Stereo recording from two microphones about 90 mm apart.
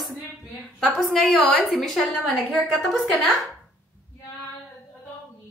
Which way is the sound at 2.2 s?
20° right (ahead or behind).